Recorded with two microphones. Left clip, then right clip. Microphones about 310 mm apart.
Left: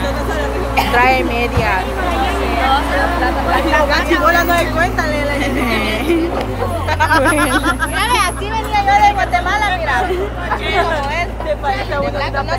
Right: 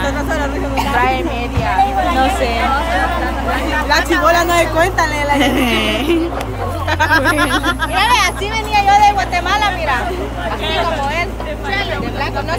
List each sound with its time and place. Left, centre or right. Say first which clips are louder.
0.9 s music: left 3 dB; left
3.9 s a sound: right 1 dB; right
5.3 s music: right 3 dB; centre
7.1 s hubbub: even; right
8.7 s vehicle: right 1 dB; right